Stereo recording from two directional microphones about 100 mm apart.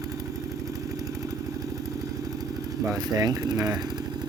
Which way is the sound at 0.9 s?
35° right (ahead or behind).